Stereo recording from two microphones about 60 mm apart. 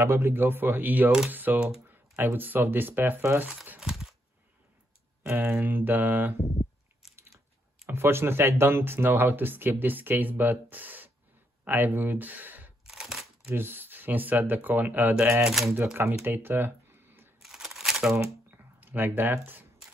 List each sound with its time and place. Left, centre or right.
0.0 s speech: right
3.8 s a sound: centre
5.3 s speech: right
7.2 s speech: right
12.8 s crunch: centre
13.5 s speech: right
16.3 s a sound: right
17.4 s a sound: centre
18.8 s speech: right